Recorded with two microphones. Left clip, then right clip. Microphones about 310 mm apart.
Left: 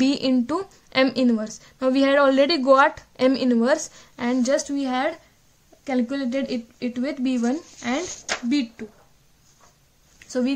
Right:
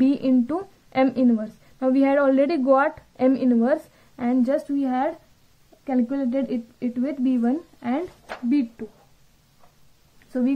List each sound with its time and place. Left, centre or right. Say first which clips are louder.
0.0 s a woman's voice: right 1 dB; left